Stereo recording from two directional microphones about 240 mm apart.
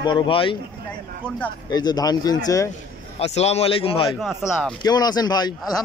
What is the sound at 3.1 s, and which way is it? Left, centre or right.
Speech, left.